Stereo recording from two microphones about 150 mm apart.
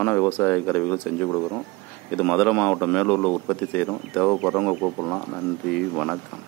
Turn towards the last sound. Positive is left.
turn(degrees=0)  # may be behind; listen again after turning